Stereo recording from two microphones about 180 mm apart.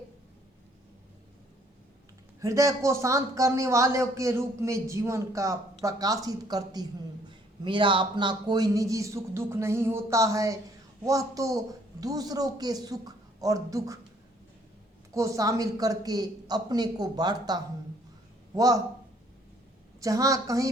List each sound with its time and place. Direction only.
2.4 s a man's voice: 20° right (ahead or behind)
15.1 s a man's voice: 15° right (ahead or behind)
20.0 s a man's voice: 20° right (ahead or behind)